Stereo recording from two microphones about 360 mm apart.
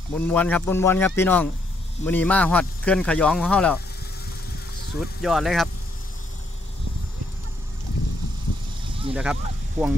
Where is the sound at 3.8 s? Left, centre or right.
Left.